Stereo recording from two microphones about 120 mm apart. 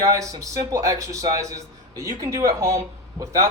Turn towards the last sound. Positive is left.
turn(degrees=-30)  # may be behind; listen again after turning